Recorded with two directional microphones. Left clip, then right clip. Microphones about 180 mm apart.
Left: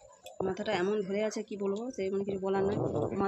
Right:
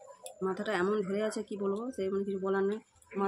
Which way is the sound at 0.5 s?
15° right (ahead or behind).